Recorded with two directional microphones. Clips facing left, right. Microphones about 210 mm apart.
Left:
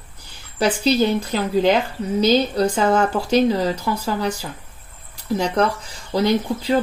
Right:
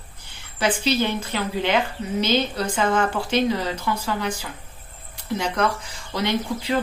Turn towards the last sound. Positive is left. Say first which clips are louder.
# left 5 dB
turn(degrees=35)  # may be behind; listen again after turning